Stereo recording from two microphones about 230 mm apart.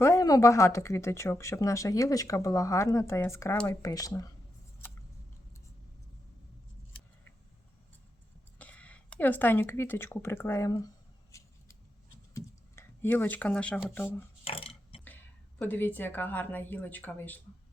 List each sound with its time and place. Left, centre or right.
0.0 s speech: centre
8.5 s speech: centre
12.3 s speech: centre
14.4 s speech: left
15.0 s a woman's voice: centre